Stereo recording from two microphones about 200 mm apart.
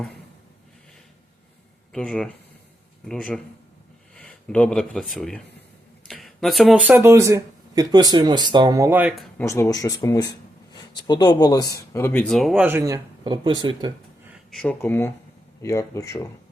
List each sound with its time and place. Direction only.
1.9 s a man's voice: 5° left (ahead or behind)
4.1 s a sound: 5° left (ahead or behind)
5.1 s a man's voice: 5° left (ahead or behind)
9.4 s speech: 15° left (ahead or behind); by 13.9 s 20° right (ahead or behind)
14.5 s speech: 5° left (ahead or behind)